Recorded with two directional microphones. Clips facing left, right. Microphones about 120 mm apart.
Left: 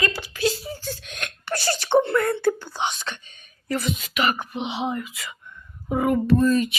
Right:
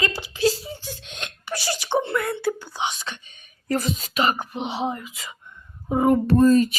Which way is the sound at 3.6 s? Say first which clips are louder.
Right 2 dB; 40° right (ahead or behind).